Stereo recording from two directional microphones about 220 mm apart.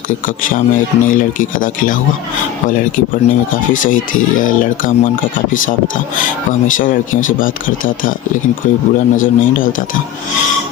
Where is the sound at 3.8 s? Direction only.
40° left (ahead or behind).